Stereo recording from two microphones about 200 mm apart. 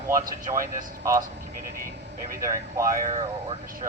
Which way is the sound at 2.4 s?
15° right (ahead or behind).